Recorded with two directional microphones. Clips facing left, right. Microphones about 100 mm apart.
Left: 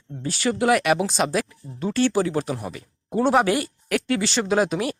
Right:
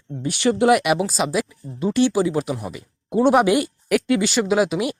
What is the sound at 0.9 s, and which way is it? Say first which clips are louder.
Speech: right 1 dB; 5° right (ahead or behind).